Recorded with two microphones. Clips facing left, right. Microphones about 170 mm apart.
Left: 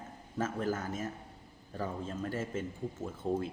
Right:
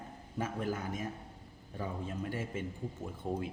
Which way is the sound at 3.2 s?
10° right (ahead or behind).